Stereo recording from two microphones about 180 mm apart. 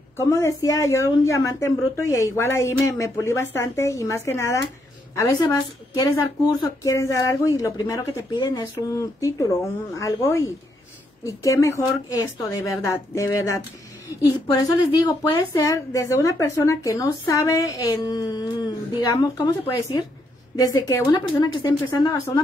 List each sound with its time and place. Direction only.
0.2 s a woman's voice: 15° left (ahead or behind)